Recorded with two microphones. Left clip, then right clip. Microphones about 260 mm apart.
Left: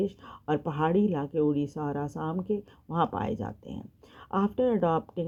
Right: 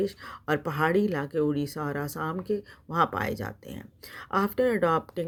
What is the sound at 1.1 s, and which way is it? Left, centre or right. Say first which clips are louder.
Speech: even; right.